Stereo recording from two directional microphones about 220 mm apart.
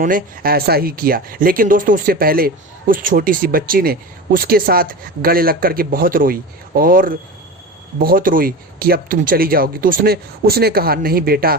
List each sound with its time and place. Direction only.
0.0 s speech: 40° right (ahead or behind)